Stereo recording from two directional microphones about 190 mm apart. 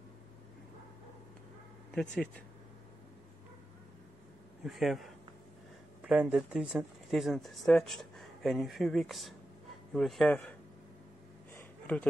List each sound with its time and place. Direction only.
1.9 s speech: centre (ahead or behind)
4.6 s speech: centre (ahead or behind)
11.5 s a sound: 10° left (ahead or behind)